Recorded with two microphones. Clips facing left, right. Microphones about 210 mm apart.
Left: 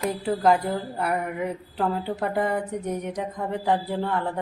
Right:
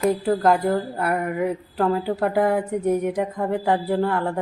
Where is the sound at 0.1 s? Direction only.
Centre (ahead or behind).